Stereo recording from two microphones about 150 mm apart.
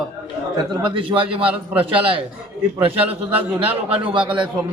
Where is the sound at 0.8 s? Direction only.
35° right (ahead or behind).